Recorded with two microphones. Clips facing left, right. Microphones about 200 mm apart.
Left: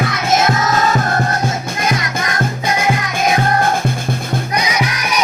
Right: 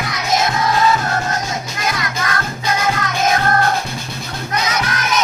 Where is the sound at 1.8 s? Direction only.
20° left (ahead or behind).